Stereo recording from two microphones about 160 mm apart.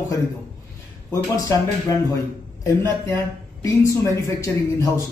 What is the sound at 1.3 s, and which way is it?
Speech, 20° left (ahead or behind).